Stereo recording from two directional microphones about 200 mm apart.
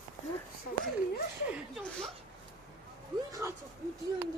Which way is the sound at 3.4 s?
15° right (ahead or behind).